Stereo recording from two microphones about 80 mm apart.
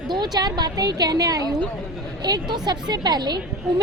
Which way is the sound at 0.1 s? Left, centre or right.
Right.